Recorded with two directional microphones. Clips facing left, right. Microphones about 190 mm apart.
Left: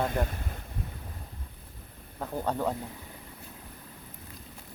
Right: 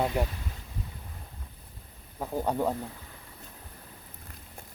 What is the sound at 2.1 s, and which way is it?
Speech, 10° right (ahead or behind).